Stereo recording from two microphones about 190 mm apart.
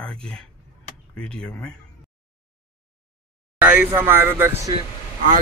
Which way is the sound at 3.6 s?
10° right (ahead or behind).